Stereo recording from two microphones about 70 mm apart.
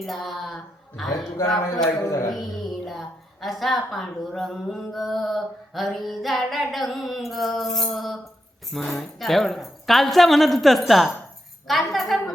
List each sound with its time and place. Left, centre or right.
0.0 s a woman's voice: centre
2.0 s speech: left
2.3 s a woman's voice: centre